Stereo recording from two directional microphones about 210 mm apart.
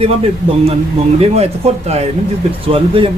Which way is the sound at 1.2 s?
30° right (ahead or behind).